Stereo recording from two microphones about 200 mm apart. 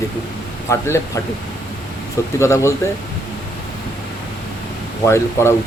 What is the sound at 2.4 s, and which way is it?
Speech, 15° left (ahead or behind).